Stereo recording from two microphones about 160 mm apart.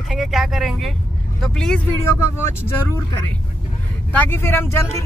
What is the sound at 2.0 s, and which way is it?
Speech, 15° left (ahead or behind).